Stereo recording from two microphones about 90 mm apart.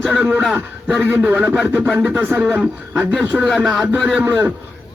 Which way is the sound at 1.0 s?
25° right (ahead or behind).